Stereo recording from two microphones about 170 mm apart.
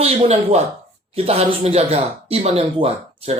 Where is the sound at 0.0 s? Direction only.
40° right (ahead or behind).